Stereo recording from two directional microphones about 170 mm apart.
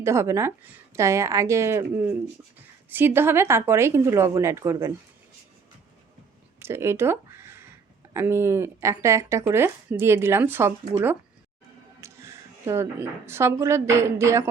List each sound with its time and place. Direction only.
0.0 s a woman's voice: 15° right (ahead or behind)
6.6 s a sound: 15° right (ahead or behind)
8.1 s a woman's voice: 15° right (ahead or behind)
11.9 s a woman's voice: 15° right (ahead or behind)